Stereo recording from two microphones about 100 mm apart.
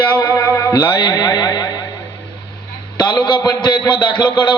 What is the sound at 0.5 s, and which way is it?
A man's voice, 35° left (ahead or behind).